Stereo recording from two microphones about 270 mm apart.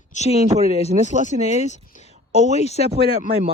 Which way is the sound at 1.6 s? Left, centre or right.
Left.